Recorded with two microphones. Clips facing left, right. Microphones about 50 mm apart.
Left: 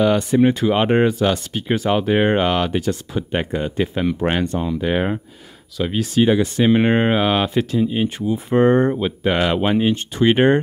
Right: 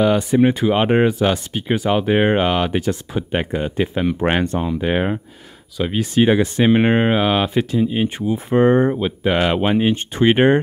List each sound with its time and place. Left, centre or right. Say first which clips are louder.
0.0 s speech: even; centre
4.2 s speech: right 2 dB; right
6.1 s speech: right 1 dB; right